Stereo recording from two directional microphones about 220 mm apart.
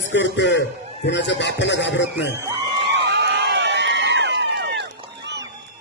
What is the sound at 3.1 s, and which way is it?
Run, 50° right (ahead or behind).